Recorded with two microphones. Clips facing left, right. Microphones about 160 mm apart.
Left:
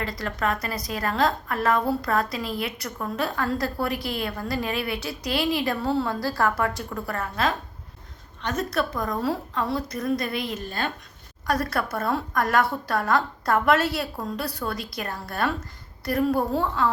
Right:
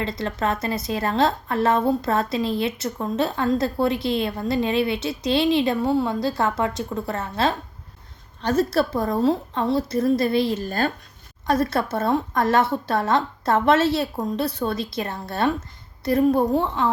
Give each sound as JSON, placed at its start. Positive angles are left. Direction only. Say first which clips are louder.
{"t": 0.0, "sound": "a woman's voice", "louder": "right 3 dB", "side_deg": -25}
{"t": 10.7, "sound": "speech", "louder": "right 6 dB", "side_deg": -40}
{"t": 11.4, "sound": "a woman's voice", "louder": "right 4 dB", "side_deg": -25}